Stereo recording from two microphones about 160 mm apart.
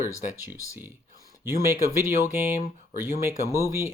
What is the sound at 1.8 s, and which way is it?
Speech, 15° right (ahead or behind).